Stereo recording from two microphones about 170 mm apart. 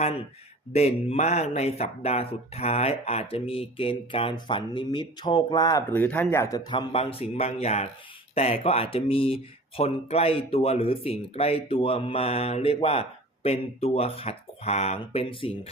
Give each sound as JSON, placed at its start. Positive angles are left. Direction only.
{"t": 0.7, "sound": "speech", "side_deg": 40}
{"t": 5.9, "sound": "speech", "side_deg": 10}
{"t": 6.7, "sound": "speech", "side_deg": 35}